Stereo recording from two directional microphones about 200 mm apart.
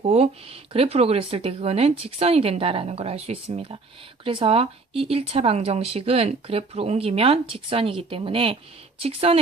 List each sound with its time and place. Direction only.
0.0 s speech: 30° right (ahead or behind)